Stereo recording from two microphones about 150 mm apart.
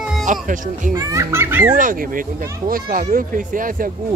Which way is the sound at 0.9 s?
20° right (ahead or behind).